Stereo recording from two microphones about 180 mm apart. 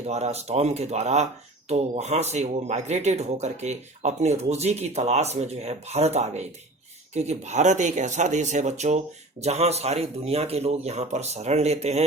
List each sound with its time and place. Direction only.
0.1 s speech: 35° right (ahead or behind)